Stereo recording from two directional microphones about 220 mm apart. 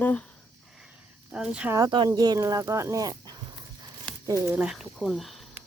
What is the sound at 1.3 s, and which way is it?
Speech, 5° right (ahead or behind).